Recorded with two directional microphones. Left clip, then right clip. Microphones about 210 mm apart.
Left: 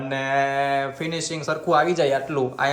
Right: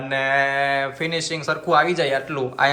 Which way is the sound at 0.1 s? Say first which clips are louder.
Right 3 dB; 20° left (ahead or behind).